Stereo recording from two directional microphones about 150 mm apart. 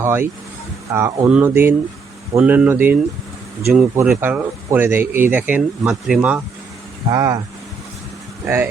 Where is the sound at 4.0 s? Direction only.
15° right (ahead or behind).